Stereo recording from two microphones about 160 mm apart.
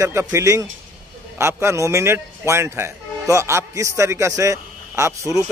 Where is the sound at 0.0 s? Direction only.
15° right (ahead or behind).